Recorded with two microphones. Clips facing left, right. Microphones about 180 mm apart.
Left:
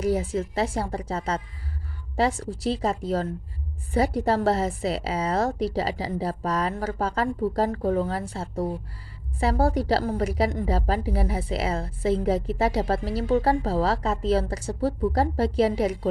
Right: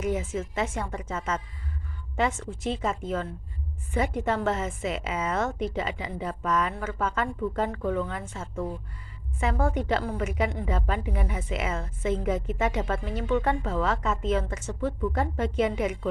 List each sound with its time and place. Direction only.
0.0 s a woman's voice: 35° left (ahead or behind)